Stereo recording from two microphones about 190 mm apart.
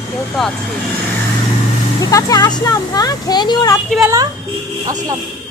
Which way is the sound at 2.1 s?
20° left (ahead or behind).